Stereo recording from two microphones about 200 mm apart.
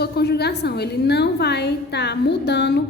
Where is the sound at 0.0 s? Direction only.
55° left (ahead or behind).